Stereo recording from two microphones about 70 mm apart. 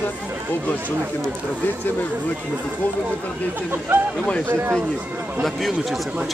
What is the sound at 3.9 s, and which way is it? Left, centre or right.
Speech, right.